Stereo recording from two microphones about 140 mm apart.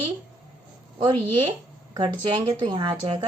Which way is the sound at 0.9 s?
35° right (ahead or behind).